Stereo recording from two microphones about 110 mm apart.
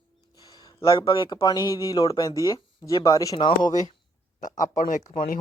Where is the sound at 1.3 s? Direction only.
35° left (ahead or behind).